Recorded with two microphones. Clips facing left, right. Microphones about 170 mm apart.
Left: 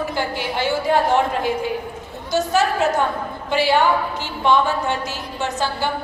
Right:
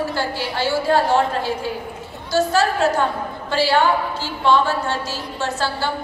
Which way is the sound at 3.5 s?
15° left (ahead or behind).